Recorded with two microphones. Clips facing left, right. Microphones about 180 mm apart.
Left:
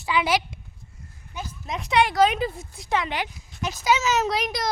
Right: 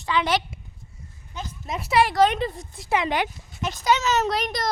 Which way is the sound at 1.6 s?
5° right (ahead or behind).